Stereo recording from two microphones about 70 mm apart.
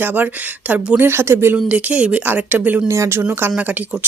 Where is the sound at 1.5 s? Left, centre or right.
Centre.